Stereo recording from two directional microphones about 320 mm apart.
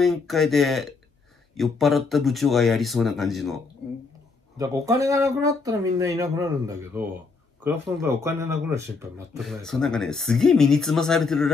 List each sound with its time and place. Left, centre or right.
0.0 s speech: centre